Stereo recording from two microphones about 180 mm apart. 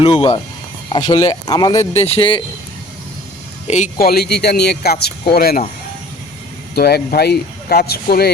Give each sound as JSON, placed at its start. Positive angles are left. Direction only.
{"t": 0.0, "sound": "speech", "side_deg": 25}
{"t": 2.0, "sound": "speech", "side_deg": 30}
{"t": 3.9, "sound": "speech", "side_deg": 60}
{"t": 6.7, "sound": "speech", "side_deg": 60}